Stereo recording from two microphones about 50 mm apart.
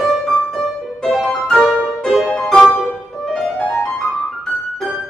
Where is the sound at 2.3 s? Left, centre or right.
Centre.